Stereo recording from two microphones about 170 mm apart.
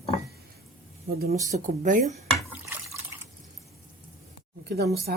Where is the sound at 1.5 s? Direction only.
45° right (ahead or behind).